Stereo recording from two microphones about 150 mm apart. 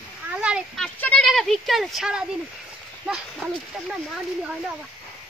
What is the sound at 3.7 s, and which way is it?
Speech, centre (ahead or behind).